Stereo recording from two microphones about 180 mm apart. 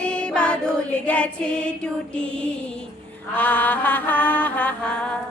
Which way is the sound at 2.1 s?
5° left (ahead or behind).